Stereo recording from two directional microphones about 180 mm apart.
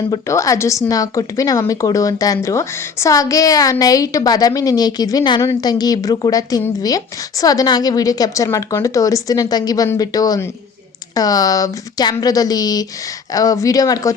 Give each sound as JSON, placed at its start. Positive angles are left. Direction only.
{"t": 0.1, "sound": "a woman's voice", "side_deg": 15}